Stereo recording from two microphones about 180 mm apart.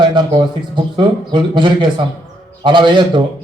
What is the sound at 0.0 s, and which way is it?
A man's voice, 25° right (ahead or behind).